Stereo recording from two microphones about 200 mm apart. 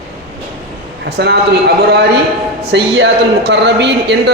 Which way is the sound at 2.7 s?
60° right (ahead or behind).